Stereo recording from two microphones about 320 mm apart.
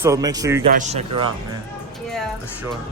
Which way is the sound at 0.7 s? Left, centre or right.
Right.